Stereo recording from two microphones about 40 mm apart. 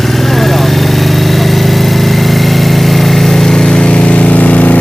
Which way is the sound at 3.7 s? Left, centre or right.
Left.